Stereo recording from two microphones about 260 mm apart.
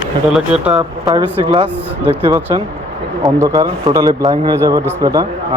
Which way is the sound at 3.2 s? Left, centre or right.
Centre.